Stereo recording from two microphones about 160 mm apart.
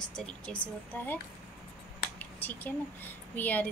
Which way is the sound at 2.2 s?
10° left (ahead or behind).